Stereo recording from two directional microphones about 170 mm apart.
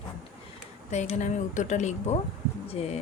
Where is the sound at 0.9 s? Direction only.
40° left (ahead or behind).